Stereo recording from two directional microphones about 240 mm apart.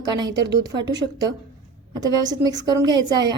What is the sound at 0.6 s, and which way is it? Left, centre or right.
Speech, centre.